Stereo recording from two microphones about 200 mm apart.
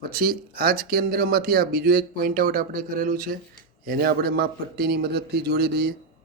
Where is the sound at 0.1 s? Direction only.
45° right (ahead or behind).